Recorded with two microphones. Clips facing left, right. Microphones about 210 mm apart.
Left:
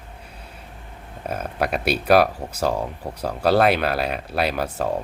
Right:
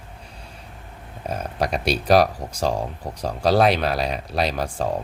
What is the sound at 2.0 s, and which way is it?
Speech, 60° left (ahead or behind).